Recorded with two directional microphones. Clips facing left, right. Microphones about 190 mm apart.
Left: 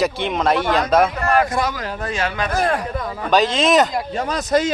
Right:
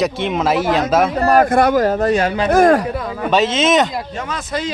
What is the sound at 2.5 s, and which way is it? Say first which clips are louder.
Speech: right 11 dB; 45° right (ahead or behind).